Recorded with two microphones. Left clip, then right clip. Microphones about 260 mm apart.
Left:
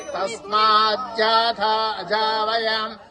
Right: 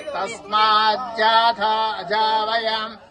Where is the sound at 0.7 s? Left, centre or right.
Right.